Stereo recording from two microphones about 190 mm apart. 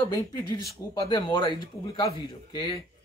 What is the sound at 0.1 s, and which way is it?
Speech, 15° left (ahead or behind).